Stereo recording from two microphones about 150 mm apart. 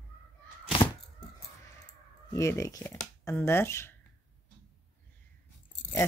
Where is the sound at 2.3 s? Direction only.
20° left (ahead or behind).